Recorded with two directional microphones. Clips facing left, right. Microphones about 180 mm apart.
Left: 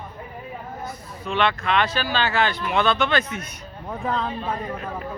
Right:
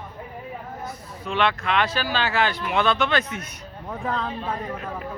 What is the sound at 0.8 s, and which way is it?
Speech, centre (ahead or behind).